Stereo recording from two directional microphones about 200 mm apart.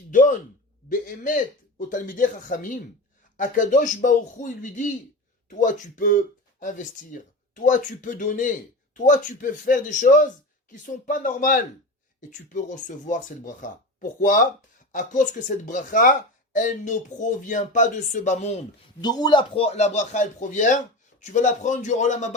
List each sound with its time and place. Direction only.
0.1 s a sound: 40° left (ahead or behind)
0.9 s a man's voice: 40° left (ahead or behind)
19.0 s speech: 20° left (ahead or behind); by 22.4 s 35° left (ahead or behind)